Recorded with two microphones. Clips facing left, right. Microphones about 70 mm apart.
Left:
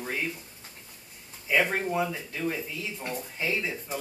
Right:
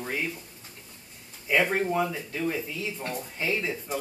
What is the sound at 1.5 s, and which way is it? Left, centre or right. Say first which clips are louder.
Speech: right 1 dB; centre.